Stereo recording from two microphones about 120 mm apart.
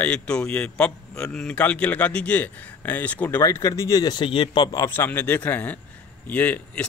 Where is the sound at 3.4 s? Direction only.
25° left (ahead or behind); by 4.7 s 45° left (ahead or behind).